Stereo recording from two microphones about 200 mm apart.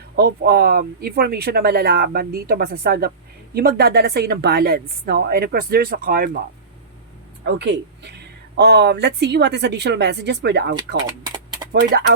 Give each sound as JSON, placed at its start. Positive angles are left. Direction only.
{"t": 0.2, "sound": "speech", "side_deg": -55}
{"t": 7.4, "sound": "a woman's voice", "side_deg": -55}